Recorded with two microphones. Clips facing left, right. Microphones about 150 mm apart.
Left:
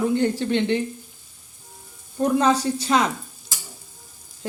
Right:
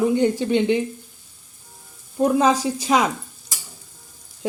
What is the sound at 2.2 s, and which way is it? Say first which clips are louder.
Speech: right 2 dB; 10° right (ahead or behind).